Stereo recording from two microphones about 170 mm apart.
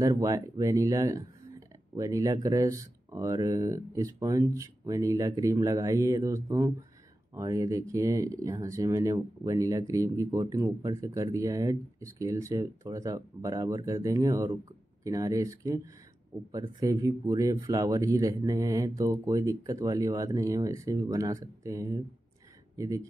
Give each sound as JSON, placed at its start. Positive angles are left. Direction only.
{"t": 0.0, "sound": "speech", "side_deg": -20}
{"t": 16.8, "sound": "speech", "side_deg": -20}